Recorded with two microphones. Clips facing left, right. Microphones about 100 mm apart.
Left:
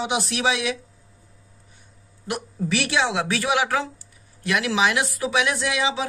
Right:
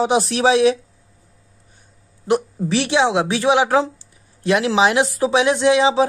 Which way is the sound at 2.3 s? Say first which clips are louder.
Right 8 dB; 30° right (ahead or behind).